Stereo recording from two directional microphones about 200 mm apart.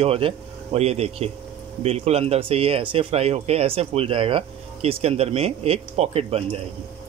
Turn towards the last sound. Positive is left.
turn(degrees=-30)  # may be behind; listen again after turning